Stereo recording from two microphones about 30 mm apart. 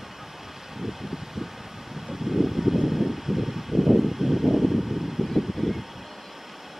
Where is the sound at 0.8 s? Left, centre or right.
Centre.